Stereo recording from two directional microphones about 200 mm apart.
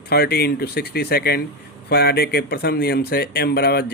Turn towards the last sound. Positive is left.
turn(degrees=55)  # may be behind; listen again after turning